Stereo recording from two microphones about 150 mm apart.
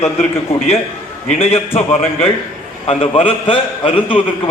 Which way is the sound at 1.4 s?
40° left (ahead or behind).